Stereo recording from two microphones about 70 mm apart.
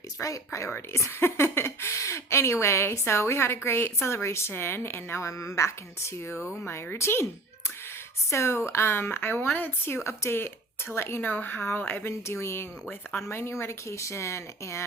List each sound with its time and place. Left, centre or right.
0.2 s speech: left
8.3 s speech: left
12.3 s speech: left